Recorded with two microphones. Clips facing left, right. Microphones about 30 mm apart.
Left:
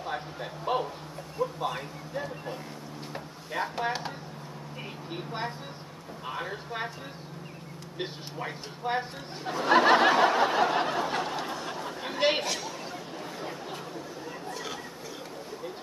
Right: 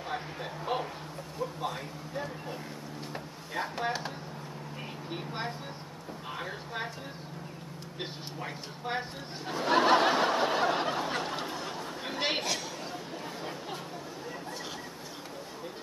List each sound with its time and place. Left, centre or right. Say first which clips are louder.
0.0 s a sound: left 2 dB; centre
1.4 s speech: left 4 dB; centre
5.1 s speech: left 2 dB; centre
8.8 s speech: left 4 dB; centre
10.4 s speech: left 3 dB; centre
11.7 s chatter: left 2 dB; centre